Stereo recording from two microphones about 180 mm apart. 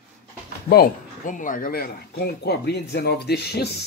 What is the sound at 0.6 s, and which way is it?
Speech, 60° left (ahead or behind).